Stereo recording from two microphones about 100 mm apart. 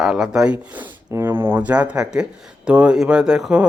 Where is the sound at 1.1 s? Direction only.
25° right (ahead or behind).